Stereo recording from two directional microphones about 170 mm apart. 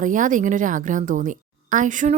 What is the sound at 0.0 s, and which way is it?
A woman's voice, 50° right (ahead or behind).